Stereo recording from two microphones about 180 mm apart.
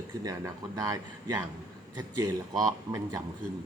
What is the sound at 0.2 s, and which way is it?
Speech, 20° right (ahead or behind).